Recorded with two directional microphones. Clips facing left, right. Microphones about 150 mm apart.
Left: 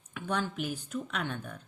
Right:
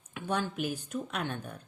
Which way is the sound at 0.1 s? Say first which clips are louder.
Right 1 dB; 15° right (ahead or behind).